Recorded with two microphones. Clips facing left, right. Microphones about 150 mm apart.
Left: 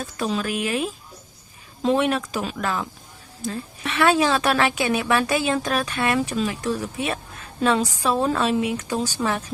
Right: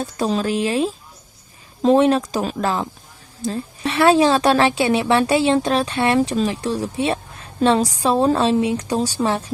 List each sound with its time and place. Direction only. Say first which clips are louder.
0.0 s a woman's voice: right 5 dB; 35° right (ahead or behind)